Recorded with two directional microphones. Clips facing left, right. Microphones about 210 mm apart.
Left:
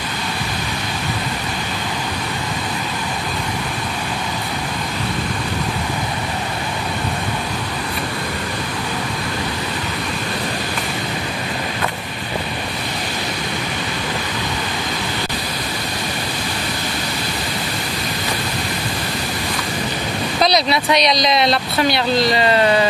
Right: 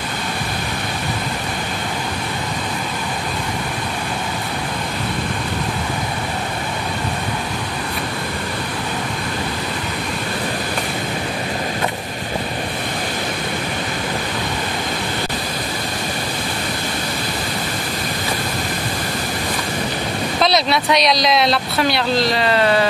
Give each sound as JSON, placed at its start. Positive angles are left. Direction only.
{"t": 20.4, "sound": "speech", "side_deg": 0}